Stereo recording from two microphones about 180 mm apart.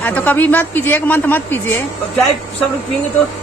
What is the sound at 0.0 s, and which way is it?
Speech, 10° left (ahead or behind).